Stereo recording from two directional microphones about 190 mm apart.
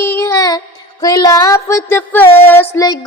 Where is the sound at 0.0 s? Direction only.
15° left (ahead or behind).